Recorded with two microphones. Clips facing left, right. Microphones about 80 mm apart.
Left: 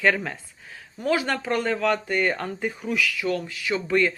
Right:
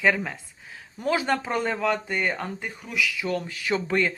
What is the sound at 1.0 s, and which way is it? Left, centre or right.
Speech, right.